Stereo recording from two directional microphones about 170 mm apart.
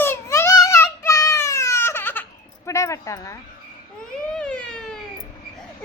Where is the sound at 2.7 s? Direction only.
15° left (ahead or behind).